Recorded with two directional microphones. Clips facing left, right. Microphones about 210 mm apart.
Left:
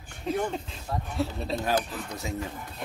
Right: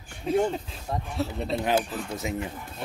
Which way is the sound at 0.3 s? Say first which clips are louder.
Right 4 dB; 5° right (ahead or behind).